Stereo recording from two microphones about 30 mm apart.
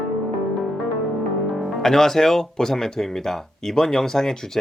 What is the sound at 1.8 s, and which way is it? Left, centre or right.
Speech, centre.